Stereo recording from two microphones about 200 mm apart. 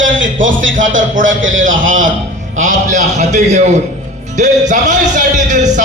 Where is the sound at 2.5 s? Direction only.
35° right (ahead or behind).